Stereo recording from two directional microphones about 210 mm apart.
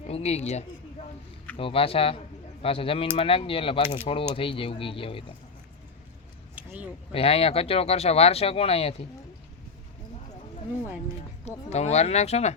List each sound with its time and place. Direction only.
0.1 s speech: 30° left (ahead or behind)
6.6 s a sound: 5° right (ahead or behind)
7.1 s speech: 25° left (ahead or behind)
11.4 s speech: 30° left (ahead or behind)